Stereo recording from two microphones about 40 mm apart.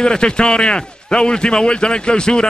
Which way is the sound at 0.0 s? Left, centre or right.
Left.